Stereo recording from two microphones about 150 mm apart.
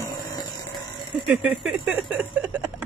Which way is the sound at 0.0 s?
25° left (ahead or behind).